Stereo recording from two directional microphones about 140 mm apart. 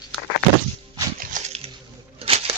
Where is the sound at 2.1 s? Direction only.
45° right (ahead or behind).